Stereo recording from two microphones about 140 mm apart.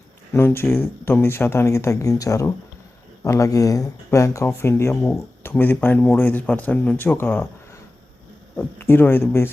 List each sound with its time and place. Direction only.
0.3 s speech: 15° left (ahead or behind)
8.5 s speech: 15° left (ahead or behind)